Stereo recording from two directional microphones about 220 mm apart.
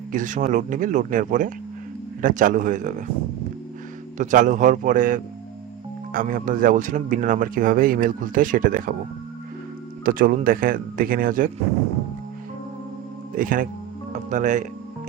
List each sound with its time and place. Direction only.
0.1 s speech: 35° right (ahead or behind)
4.2 s speech: 35° right (ahead or behind)
10.0 s speech: 40° right (ahead or behind)
13.3 s speech: 40° right (ahead or behind)